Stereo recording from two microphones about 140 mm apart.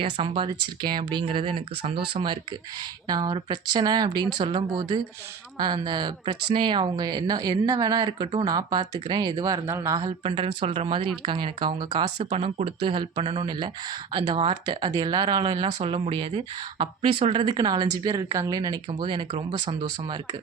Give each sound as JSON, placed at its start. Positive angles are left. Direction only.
{"t": 0.0, "sound": "speech", "side_deg": -40}
{"t": 3.1, "sound": "speech", "side_deg": -30}
{"t": 10.2, "sound": "speech", "side_deg": -40}
{"t": 12.3, "sound": "speech", "side_deg": -50}